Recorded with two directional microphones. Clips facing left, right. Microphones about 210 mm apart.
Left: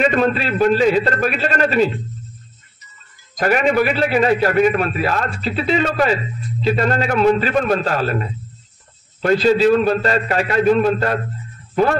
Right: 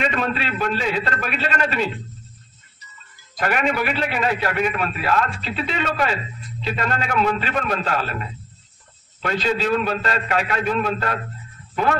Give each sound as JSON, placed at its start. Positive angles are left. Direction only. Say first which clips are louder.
{"t": 0.0, "sound": "a man's voice", "louder": "left 7 dB", "side_deg": 45}
{"t": 3.3, "sound": "a man's voice", "louder": "left 6 dB", "side_deg": 40}